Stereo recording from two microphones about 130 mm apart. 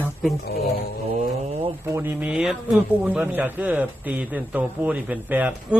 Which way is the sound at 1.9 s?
20° right (ahead or behind).